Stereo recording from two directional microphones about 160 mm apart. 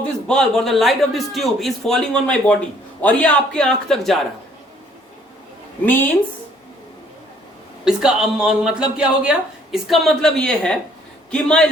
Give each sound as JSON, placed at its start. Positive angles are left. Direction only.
{"t": 0.3, "sound": "a man's voice", "side_deg": 5}
{"t": 7.9, "sound": "a man's voice", "side_deg": -5}